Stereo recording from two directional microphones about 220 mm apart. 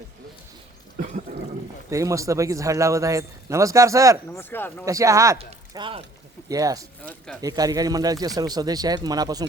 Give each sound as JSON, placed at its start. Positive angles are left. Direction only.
{"t": 1.3, "sound": "a sound", "side_deg": -40}
{"t": 1.9, "sound": "a man's voice", "side_deg": -15}
{"t": 4.3, "sound": "speech", "side_deg": 10}
{"t": 4.9, "sound": "a man's voice", "side_deg": -15}
{"t": 7.0, "sound": "speech", "side_deg": 10}
{"t": 7.4, "sound": "a man's voice", "side_deg": -15}